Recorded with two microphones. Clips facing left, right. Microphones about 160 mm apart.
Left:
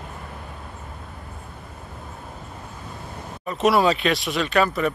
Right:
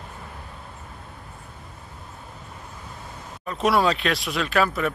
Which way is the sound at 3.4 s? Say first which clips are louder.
Left 2 dB; centre (ahead or behind).